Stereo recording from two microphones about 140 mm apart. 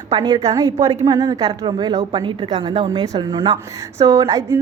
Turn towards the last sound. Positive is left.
turn(degrees=-25)  # may be behind; listen again after turning